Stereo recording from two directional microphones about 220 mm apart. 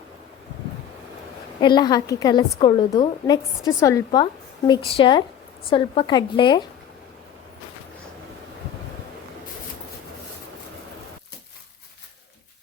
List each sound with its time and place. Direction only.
1.6 s a woman's voice: 20° left (ahead or behind)